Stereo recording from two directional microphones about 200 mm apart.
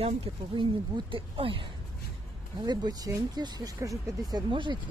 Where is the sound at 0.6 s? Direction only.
25° right (ahead or behind).